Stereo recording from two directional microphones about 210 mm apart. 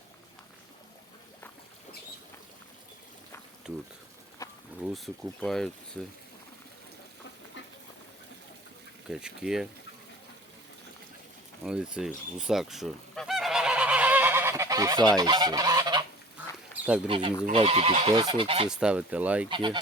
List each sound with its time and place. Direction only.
3.6 s speech: 5° right (ahead or behind)
4.4 s a sound: 15° left (ahead or behind)
4.9 s speech: centre (ahead or behind)
9.0 s speech: 5° right (ahead or behind)
11.6 s goose: 5° right (ahead or behind); by 16.0 s 20° right (ahead or behind)
16.8 s speech: 5° right (ahead or behind)
17.1 s speech: 25° right (ahead or behind)
18.7 s speech: 5° right (ahead or behind)
19.5 s speech: 20° right (ahead or behind)